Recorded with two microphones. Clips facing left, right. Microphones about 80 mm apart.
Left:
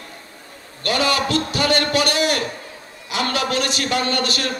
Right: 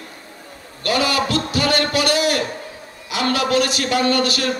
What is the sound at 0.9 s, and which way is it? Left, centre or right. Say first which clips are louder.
A man's voice: right 1 dB; left.